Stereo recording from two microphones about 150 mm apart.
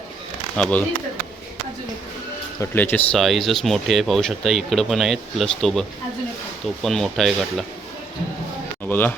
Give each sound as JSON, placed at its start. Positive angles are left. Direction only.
{"t": 0.5, "sound": "speech", "side_deg": 10}
{"t": 2.6, "sound": "speech", "side_deg": 15}
{"t": 3.2, "sound": "speech", "side_deg": 0}
{"t": 6.8, "sound": "speech", "side_deg": 0}
{"t": 8.9, "sound": "speech", "side_deg": 10}